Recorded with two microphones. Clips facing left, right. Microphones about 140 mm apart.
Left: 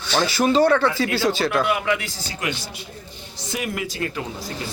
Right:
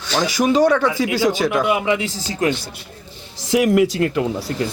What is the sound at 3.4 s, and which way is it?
Speech, 90° right.